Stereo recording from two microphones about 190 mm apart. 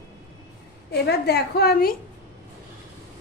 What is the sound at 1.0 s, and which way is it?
Speech, 55° left (ahead or behind).